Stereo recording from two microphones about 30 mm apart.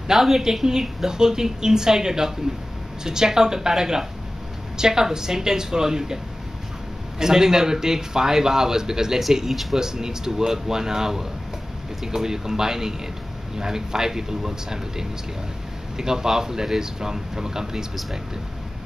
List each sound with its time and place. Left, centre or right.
0.1 s speech: centre
0.7 s a man's voice: right
7.2 s a man's voice: centre
9.5 s speech: centre
9.8 s a man's voice: centre